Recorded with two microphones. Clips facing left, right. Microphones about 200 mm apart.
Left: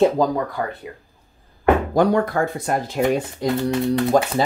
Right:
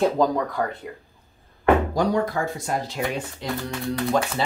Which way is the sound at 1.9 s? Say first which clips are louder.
Left 5 dB; 55° left (ahead or behind).